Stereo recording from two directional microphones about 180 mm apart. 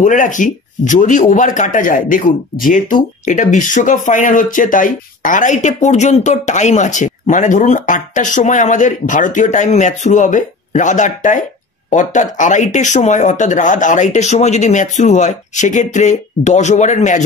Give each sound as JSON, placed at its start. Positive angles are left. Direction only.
{"t": 0.0, "sound": "speech", "side_deg": 45}